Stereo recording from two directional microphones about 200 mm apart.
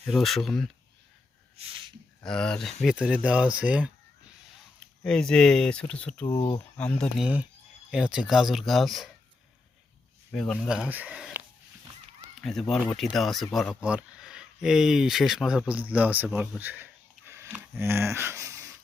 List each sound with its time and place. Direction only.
0.0 s speech: centre (ahead or behind)
1.5 s a sound: 25° right (ahead or behind)
2.2 s speech: 5° left (ahead or behind)
5.0 s speech: 5° left (ahead or behind)
6.2 s speech: 20° left (ahead or behind)
6.7 s speech: 5° left (ahead or behind)
10.3 s speech: 5° left (ahead or behind); by 18.7 s 15° right (ahead or behind)